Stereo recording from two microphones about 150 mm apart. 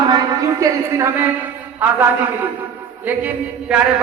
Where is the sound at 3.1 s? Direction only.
10° right (ahead or behind).